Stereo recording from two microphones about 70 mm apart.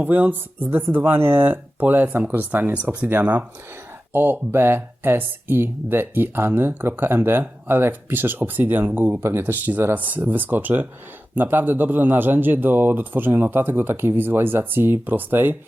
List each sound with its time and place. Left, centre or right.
0.0 s a man's voice: right